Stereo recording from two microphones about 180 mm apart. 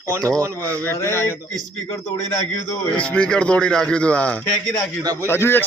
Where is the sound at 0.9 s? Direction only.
15° left (ahead or behind).